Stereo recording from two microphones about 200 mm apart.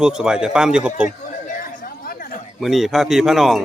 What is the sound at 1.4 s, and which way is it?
Chatter, 45° left (ahead or behind).